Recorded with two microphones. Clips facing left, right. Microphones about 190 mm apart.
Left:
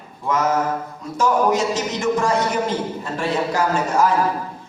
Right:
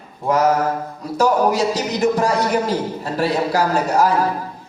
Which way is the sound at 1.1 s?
35° right (ahead or behind).